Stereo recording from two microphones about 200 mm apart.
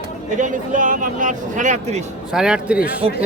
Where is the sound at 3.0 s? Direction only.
30° right (ahead or behind).